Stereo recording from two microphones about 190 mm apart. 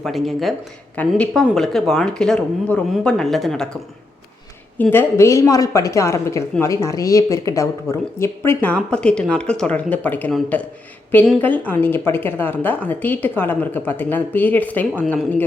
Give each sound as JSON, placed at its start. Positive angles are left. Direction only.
{"t": 0.0, "sound": "a woman's voice", "side_deg": 0}
{"t": 4.8, "sound": "a woman's voice", "side_deg": 10}